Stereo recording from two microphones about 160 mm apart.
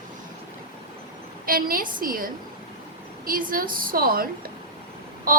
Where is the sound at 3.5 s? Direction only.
60° right (ahead or behind).